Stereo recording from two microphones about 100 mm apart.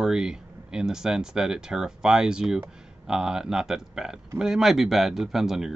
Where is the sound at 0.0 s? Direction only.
5° right (ahead or behind).